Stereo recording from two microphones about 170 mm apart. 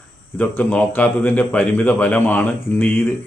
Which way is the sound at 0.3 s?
10° left (ahead or behind).